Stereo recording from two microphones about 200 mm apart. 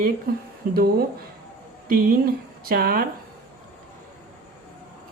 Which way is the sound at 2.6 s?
50° right (ahead or behind).